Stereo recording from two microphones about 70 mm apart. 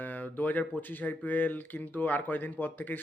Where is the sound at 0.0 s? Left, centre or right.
Left.